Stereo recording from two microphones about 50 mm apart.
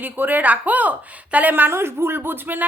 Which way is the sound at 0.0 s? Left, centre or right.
Right.